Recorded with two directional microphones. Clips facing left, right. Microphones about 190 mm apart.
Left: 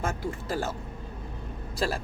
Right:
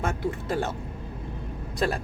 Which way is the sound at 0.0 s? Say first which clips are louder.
Right 3 dB; centre (ahead or behind).